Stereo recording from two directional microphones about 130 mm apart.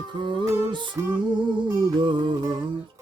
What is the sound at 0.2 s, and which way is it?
Music, 40° right (ahead or behind).